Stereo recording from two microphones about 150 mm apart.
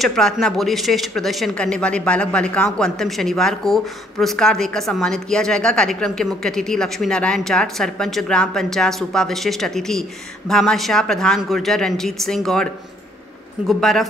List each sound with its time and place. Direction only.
0.0 s speech: 5° left (ahead or behind)
13.7 s speech: centre (ahead or behind)